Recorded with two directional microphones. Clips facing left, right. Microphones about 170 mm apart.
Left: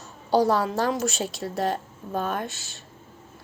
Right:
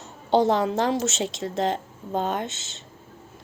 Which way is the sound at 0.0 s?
20° right (ahead or behind).